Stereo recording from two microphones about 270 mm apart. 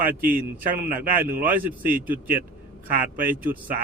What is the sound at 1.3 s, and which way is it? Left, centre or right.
Speech, right.